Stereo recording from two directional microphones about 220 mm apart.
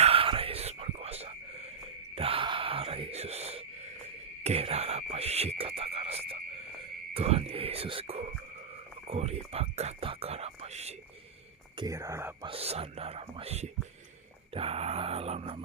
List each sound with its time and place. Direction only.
0.0 s whispering: 25° right (ahead or behind)
2.1 s a sound: 25° right (ahead or behind)
7.1 s whispering: 25° right (ahead or behind)
9.0 s speech: 25° right (ahead or behind)
11.8 s speech: 15° right (ahead or behind)
12.5 s speech: 25° right (ahead or behind)